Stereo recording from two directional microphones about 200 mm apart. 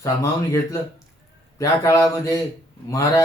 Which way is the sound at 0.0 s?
15° left (ahead or behind).